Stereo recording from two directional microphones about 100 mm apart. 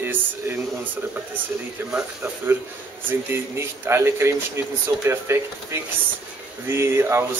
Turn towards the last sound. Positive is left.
turn(degrees=-25)  # may be behind; listen again after turning